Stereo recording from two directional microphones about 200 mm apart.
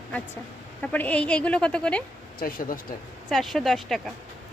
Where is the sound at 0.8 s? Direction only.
5° left (ahead or behind).